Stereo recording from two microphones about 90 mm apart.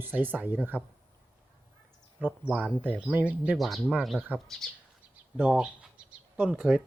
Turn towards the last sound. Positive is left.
turn(degrees=-5)  # may be behind; listen again after turning